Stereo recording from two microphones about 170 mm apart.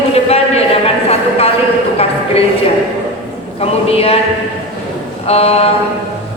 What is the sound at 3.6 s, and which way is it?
Speech, 35° left (ahead or behind).